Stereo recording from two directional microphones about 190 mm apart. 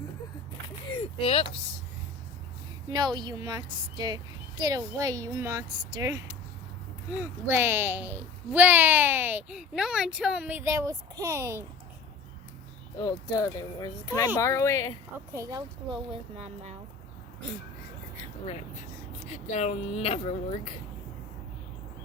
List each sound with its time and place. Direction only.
0.9 s a sound: 30° left (ahead or behind)
2.9 s a woman's voice: 20° right (ahead or behind)
13.0 s speech: 20° left (ahead or behind)
15.4 s a woman's voice: 20° right (ahead or behind)
19.5 s speech: 35° left (ahead or behind)